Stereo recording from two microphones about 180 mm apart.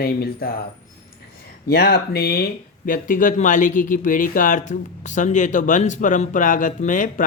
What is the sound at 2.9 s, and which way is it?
Speech, 50° left (ahead or behind).